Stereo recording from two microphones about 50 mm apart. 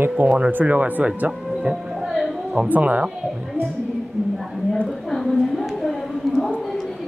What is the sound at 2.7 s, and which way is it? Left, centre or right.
Speech, right.